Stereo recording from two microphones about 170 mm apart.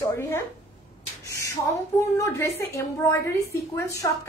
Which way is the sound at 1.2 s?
20° left (ahead or behind).